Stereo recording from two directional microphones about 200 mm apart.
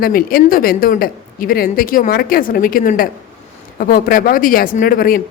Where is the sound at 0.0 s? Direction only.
45° left (ahead or behind).